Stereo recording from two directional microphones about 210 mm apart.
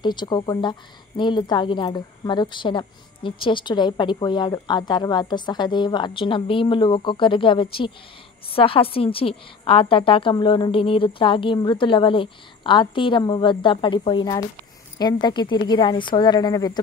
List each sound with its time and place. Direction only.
0.0 s a woman's voice: 20° left (ahead or behind)